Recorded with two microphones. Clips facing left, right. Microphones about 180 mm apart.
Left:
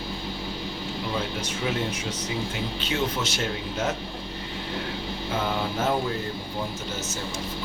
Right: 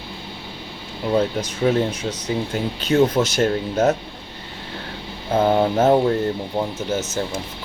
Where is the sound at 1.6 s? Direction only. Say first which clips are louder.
Right 10 dB; 40° right (ahead or behind).